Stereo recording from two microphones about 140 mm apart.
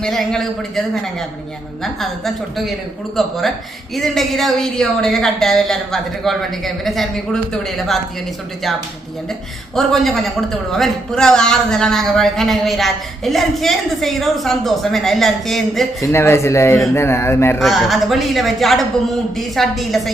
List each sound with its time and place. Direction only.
0.0 s a man's voice: 5° left (ahead or behind)
9.7 s a man's voice: centre (ahead or behind)
16.0 s speech: 20° left (ahead or behind)
17.6 s a man's voice: centre (ahead or behind)